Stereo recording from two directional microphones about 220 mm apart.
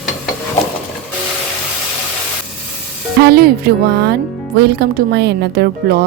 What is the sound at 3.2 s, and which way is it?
Speech, 45° right (ahead or behind).